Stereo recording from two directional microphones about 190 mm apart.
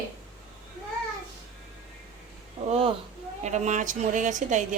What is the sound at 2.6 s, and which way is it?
A woman's voice, 30° right (ahead or behind).